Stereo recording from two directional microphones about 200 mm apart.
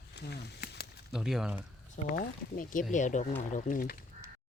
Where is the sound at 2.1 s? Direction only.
45° left (ahead or behind).